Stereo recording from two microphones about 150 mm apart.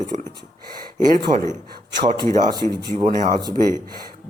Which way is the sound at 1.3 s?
25° right (ahead or behind).